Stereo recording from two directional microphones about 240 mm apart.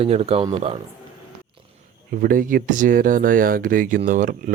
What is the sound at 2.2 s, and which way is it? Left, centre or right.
A man's voice, right.